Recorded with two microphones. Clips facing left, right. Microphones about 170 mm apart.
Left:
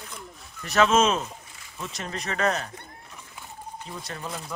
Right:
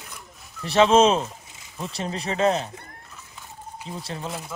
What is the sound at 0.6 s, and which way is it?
Speech, 30° right (ahead or behind).